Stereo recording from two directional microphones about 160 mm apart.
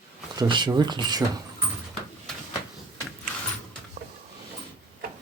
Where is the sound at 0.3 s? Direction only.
30° right (ahead or behind).